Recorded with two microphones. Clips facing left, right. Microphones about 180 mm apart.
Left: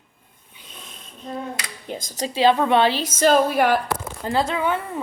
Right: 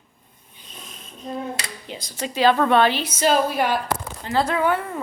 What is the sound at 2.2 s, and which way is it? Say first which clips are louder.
Speech: even; 25° left (ahead or behind).